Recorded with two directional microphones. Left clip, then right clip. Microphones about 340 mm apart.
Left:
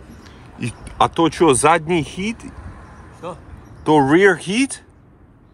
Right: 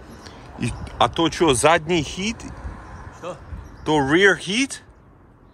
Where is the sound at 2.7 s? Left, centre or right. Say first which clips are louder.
Right 2 dB; right.